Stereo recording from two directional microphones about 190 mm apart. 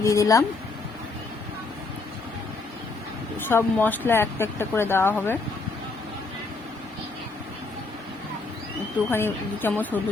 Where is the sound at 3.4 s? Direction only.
10° left (ahead or behind).